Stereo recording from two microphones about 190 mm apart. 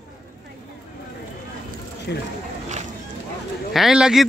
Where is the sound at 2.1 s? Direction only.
65° left (ahead or behind).